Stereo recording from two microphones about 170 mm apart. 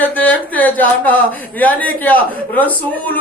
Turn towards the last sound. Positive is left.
turn(degrees=10)  # may be behind; listen again after turning